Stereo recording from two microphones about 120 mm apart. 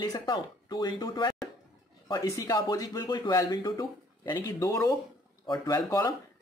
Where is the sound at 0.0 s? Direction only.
35° left (ahead or behind).